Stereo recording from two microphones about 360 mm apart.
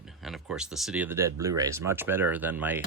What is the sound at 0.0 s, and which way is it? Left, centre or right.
Speech, centre.